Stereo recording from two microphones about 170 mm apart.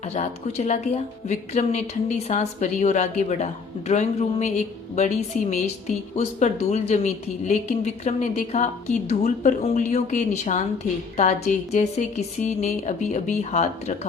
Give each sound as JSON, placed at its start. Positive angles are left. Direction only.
{"t": 0.0, "sound": "a woman's voice", "side_deg": 40}